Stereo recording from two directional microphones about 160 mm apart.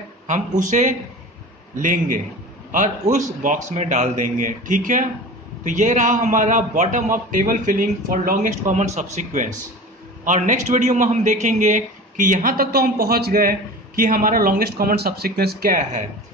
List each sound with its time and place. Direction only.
0.3 s a man's voice: 50° right (ahead or behind)